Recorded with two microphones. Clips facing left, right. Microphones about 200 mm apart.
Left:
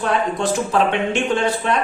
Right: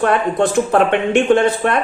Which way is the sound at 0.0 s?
55° right (ahead or behind).